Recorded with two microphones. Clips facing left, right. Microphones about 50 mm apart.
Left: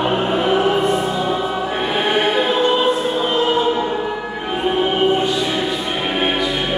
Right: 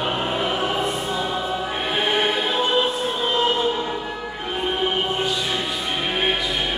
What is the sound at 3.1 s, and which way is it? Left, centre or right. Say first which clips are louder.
Choir: left 4 dB; centre.